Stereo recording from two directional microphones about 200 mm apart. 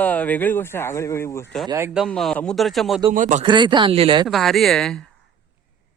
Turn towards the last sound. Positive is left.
turn(degrees=0)  # may be behind; listen again after turning